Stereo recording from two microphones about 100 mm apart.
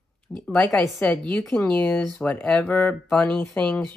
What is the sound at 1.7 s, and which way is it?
Speech, 15° left (ahead or behind).